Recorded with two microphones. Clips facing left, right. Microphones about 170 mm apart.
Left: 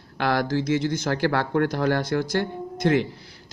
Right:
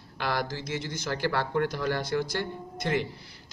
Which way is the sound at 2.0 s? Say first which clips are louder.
Left 5 dB; 45° left (ahead or behind).